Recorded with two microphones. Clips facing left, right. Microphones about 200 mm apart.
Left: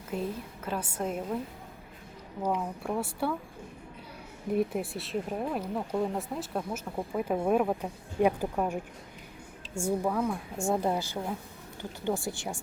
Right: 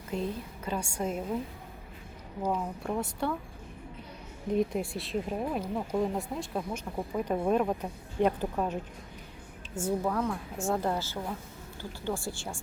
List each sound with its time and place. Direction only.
0.1 s speech: 5° left (ahead or behind)
2.6 s speech: 5° left (ahead or behind)
4.5 s a woman's voice: 5° left (ahead or behind)